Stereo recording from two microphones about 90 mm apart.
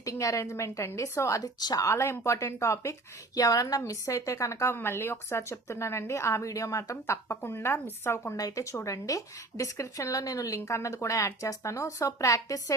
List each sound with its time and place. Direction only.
0.0 s a woman's voice: 40° left (ahead or behind)
1.5 s a woman's voice: 45° left (ahead or behind)
3.3 s a woman's voice: 40° left (ahead or behind)
8.4 s a woman's voice: 40° left (ahead or behind)